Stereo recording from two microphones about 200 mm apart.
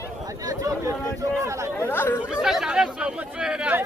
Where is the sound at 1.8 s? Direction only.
10° left (ahead or behind).